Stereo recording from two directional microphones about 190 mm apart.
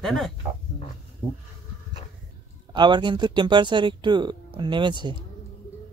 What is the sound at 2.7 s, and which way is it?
Speech, 25° right (ahead or behind).